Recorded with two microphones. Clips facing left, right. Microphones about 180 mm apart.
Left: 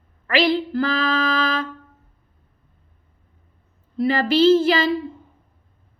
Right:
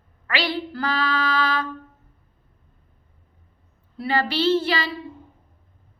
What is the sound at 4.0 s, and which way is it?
Child singing, 45° left (ahead or behind).